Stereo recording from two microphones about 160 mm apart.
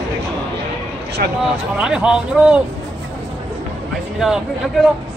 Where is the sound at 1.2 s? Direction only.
65° right (ahead or behind).